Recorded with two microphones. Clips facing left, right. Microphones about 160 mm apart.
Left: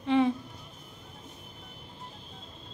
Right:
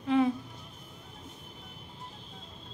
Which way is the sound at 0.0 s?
Centre (ahead or behind).